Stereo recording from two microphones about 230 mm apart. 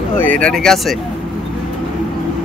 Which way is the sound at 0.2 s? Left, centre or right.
Centre.